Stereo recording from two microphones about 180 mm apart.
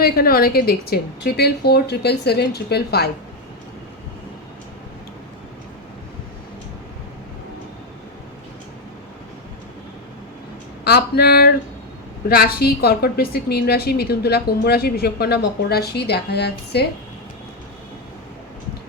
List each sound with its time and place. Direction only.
0.0 s a woman's voice: 55° left (ahead or behind)
10.8 s a woman's voice: 65° left (ahead or behind)